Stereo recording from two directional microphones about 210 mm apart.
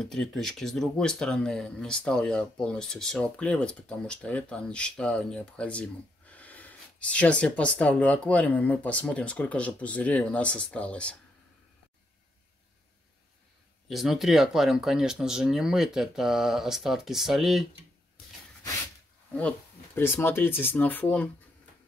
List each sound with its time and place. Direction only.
0.0 s speech: centre (ahead or behind)
13.8 s speech: centre (ahead or behind)
20.0 s speech: 10° left (ahead or behind)